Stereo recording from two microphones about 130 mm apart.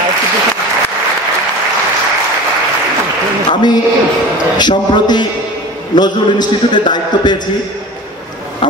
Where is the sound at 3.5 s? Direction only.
35° left (ahead or behind).